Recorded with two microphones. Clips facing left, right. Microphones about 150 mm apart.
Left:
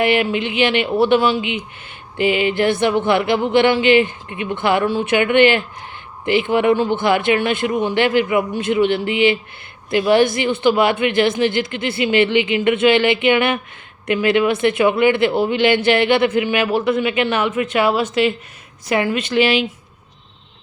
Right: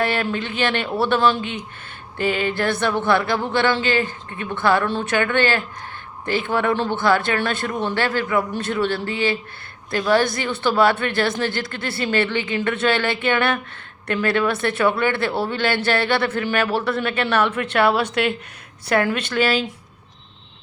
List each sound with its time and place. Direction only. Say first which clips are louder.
0.0 s a man's voice: left 5 dB; 15° left (ahead or behind)